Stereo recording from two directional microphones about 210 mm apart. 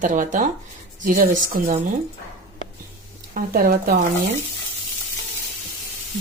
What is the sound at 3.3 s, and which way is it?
Speech, 45° right (ahead or behind).